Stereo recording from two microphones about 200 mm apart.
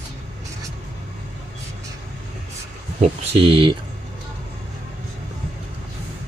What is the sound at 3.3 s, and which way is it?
Speech, 30° right (ahead or behind).